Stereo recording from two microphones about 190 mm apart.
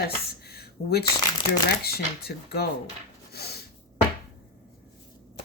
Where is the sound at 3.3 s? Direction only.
55° left (ahead or behind).